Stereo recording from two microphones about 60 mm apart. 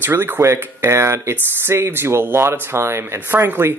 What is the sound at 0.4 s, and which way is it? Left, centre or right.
Speech, right.